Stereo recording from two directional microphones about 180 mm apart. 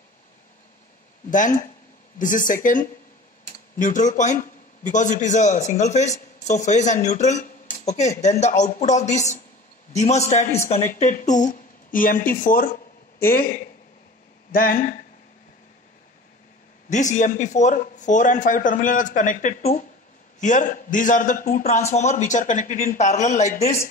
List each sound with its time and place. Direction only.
1.3 s a man's voice: 45° left (ahead or behind)
16.9 s a man's voice: 45° left (ahead or behind)